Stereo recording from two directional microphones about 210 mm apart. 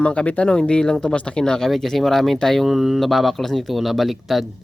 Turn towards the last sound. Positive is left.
turn(degrees=0)  # may be behind; listen again after turning